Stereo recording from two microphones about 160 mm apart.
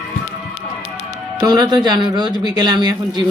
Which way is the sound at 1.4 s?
25° right (ahead or behind).